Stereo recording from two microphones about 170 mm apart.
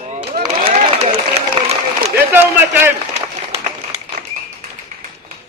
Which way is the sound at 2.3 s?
10° right (ahead or behind).